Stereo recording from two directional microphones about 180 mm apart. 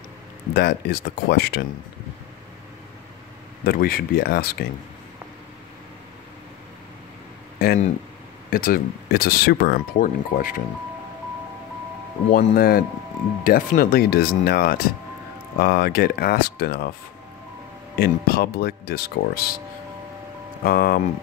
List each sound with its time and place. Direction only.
0.6 s speech: 65° left (ahead or behind)
3.6 s speech: 55° left (ahead or behind)
7.5 s speech: 55° left (ahead or behind)
12.3 s speech: 55° left (ahead or behind)
17.9 s speech: 55° left (ahead or behind)
20.6 s speech: 55° left (ahead or behind)